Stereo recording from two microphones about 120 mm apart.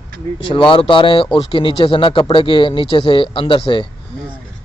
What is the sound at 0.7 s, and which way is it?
A man's voice, 45° left (ahead or behind).